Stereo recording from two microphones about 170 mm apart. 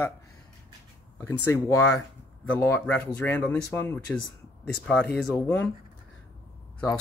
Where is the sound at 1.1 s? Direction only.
15° left (ahead or behind).